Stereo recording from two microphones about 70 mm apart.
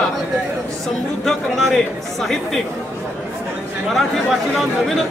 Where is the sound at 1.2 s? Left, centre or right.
Centre.